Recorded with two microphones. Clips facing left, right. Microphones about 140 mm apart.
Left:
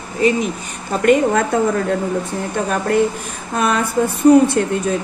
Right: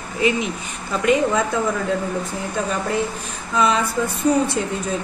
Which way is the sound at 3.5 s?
55° left (ahead or behind).